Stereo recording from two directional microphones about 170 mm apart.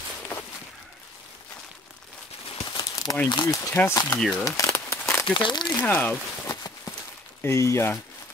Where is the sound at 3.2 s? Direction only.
30° left (ahead or behind).